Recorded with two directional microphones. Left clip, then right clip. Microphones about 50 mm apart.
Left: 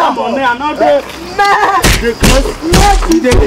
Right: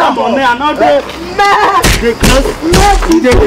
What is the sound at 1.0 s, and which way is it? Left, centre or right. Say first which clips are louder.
Speech: right 2 dB; centre.